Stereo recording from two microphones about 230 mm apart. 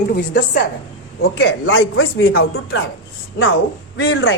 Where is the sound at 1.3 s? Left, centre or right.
Left.